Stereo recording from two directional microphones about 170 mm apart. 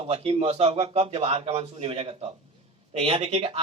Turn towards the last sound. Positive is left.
turn(degrees=-35)  # may be behind; listen again after turning